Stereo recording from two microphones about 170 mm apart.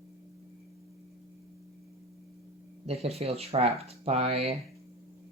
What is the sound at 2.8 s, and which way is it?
Speech, 35° right (ahead or behind).